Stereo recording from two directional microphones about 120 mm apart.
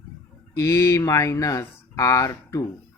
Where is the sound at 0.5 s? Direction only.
25° left (ahead or behind).